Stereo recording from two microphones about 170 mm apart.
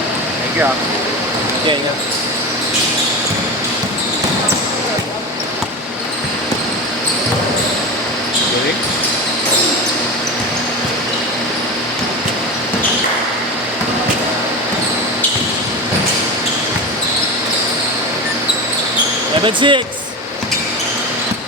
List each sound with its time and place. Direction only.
19.5 s speech: 30° right (ahead or behind)